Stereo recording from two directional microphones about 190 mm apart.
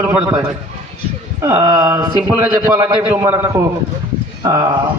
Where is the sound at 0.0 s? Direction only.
10° right (ahead or behind).